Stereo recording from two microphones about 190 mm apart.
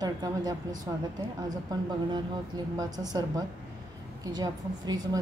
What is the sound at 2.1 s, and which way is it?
A woman's voice, 20° right (ahead or behind).